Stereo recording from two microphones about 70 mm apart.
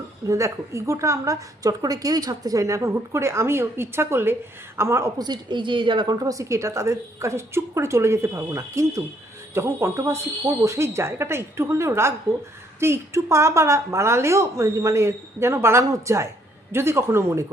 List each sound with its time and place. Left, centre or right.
0.3 s speech: right
1.8 s speech: right
5.1 s a woman's voice: right
6.1 s a woman's voice: right
6.3 s speech: right